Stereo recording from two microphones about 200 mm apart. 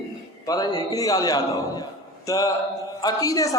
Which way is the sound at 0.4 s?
20° left (ahead or behind).